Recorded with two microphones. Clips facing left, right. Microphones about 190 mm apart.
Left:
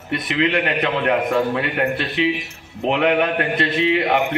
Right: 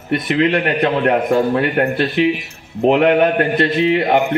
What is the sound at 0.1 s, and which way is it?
A man's voice, 35° right (ahead or behind).